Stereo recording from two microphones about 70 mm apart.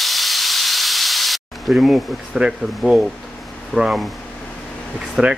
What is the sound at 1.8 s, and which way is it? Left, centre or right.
Speech, centre.